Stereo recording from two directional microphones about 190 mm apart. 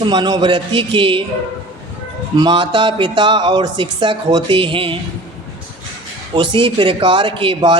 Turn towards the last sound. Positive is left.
turn(degrees=-25)  # may be behind; listen again after turning